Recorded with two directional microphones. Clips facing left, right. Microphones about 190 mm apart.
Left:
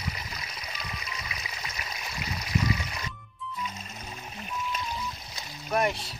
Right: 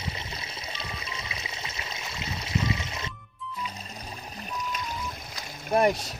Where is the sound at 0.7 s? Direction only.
25° right (ahead or behind).